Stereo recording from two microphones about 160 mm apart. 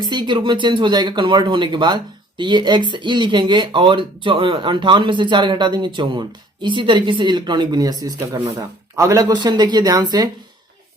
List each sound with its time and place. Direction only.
0.0 s speech: 30° right (ahead or behind)